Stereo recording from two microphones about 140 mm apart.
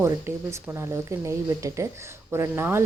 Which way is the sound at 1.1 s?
20° right (ahead or behind).